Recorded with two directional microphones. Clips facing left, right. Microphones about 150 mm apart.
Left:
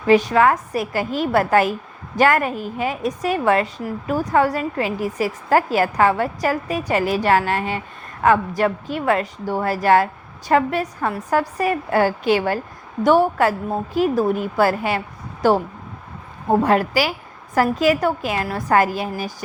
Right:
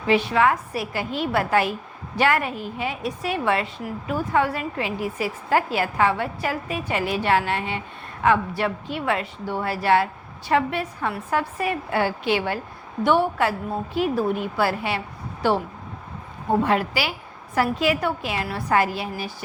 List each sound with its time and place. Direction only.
0.1 s a woman's voice: 40° left (ahead or behind)